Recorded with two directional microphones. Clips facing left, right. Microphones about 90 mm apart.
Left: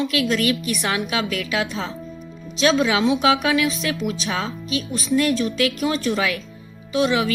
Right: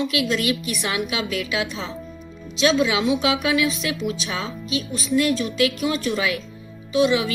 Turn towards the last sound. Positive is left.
turn(degrees=35)  # may be behind; listen again after turning